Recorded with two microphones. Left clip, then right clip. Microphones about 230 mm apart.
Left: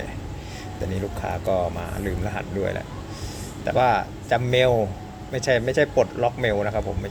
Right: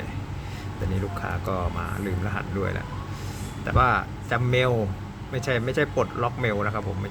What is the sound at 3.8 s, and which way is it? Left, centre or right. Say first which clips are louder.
Speech: left 2 dB; centre.